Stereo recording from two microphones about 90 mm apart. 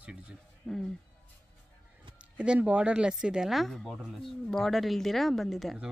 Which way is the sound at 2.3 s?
10° right (ahead or behind).